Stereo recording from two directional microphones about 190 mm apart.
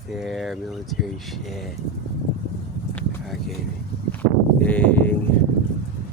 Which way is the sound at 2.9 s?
5° left (ahead or behind).